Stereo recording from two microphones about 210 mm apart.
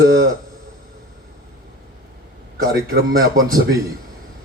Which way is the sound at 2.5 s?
45° right (ahead or behind).